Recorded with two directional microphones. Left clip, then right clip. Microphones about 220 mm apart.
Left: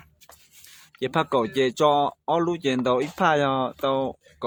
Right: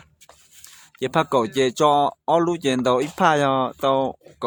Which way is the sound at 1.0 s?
15° right (ahead or behind).